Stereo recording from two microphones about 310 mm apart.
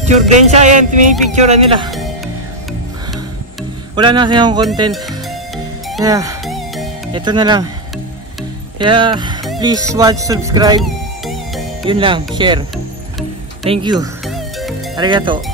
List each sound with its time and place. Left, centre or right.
0.0 s music: right
1.9 s music: centre
3.9 s music: centre
6.0 s music: centre
6.4 s music: centre
7.2 s music: centre
8.7 s music: centre
10.8 s music: centre
11.8 s music: centre
13.7 s music: centre
14.2 s music: centre
15.0 s music: centre